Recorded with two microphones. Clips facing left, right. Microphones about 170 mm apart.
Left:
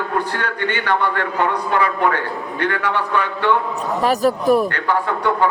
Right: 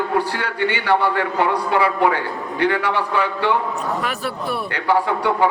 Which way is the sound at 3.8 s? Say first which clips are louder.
Left 6 dB; 35° left (ahead or behind).